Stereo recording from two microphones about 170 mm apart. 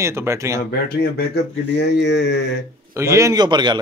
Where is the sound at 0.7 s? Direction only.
70° left (ahead or behind).